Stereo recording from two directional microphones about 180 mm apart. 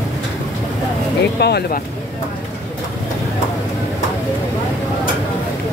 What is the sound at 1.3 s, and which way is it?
Speech, 65° left (ahead or behind).